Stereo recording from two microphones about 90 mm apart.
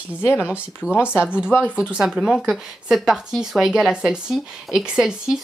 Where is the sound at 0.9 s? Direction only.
25° left (ahead or behind).